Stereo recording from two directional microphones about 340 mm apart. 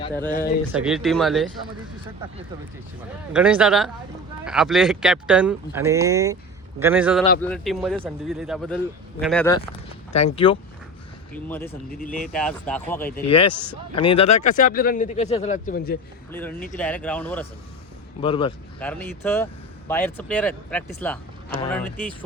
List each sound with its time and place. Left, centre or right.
0.0 s speech: centre
0.3 s speech: left
0.7 s a man's voice: centre
3.3 s a man's voice: centre
10.3 s a man's voice: centre
13.1 s speech: centre
16.3 s a man's voice: centre
18.2 s speech: centre
18.8 s a man's voice: centre